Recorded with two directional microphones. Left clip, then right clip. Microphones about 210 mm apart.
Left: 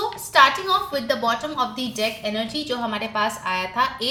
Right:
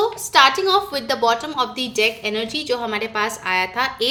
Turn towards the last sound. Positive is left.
turn(degrees=-45)  # may be behind; listen again after turning